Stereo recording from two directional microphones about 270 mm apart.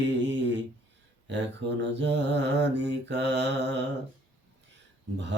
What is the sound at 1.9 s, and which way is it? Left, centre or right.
Mantra, right.